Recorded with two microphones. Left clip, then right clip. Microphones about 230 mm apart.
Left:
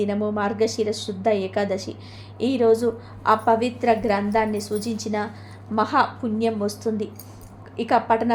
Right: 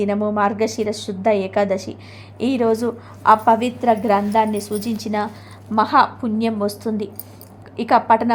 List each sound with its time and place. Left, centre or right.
0.0 s a woman's voice: centre